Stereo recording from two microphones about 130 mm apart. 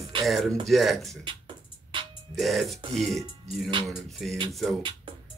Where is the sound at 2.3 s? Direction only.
Centre (ahead or behind).